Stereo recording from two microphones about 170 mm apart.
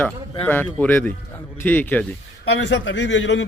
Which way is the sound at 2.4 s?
90° left.